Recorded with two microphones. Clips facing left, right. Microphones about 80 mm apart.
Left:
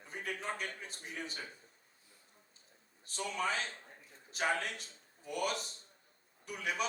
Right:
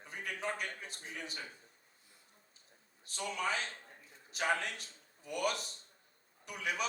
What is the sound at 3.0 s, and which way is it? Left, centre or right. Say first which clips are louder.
A man's voice: left 1 dB; left.